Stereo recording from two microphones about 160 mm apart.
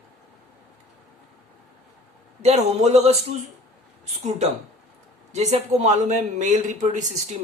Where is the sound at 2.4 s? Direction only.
45° right (ahead or behind).